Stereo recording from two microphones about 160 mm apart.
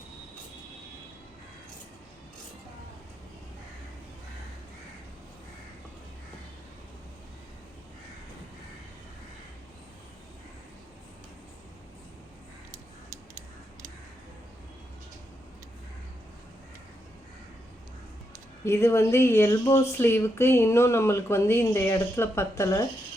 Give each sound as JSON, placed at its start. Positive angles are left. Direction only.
{"t": 18.6, "sound": "speech", "side_deg": 15}